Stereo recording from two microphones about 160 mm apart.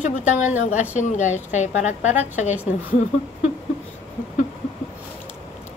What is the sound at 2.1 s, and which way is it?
Speech, 10° right (ahead or behind).